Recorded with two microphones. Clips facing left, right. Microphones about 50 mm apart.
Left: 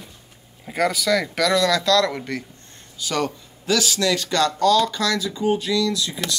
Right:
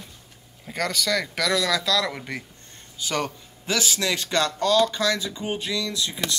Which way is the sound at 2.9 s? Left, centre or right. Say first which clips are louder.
Left 3 dB; right.